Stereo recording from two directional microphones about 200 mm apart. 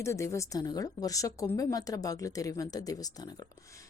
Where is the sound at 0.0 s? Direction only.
15° left (ahead or behind).